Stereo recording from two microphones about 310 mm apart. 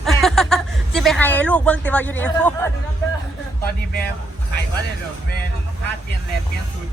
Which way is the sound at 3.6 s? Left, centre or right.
Left.